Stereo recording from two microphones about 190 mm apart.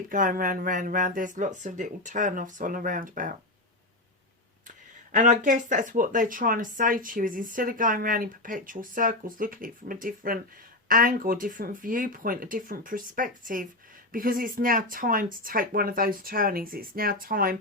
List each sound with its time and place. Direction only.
0.1 s speech: 45° right (ahead or behind)
5.1 s speech: 40° right (ahead or behind)